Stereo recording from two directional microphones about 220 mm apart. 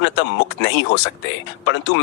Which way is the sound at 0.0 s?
55° left (ahead or behind).